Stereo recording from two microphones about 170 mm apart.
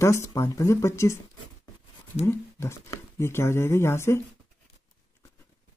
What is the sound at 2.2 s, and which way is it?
Speech, 15° left (ahead or behind).